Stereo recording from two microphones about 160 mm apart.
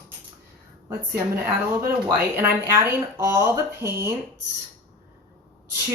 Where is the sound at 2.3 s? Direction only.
15° right (ahead or behind).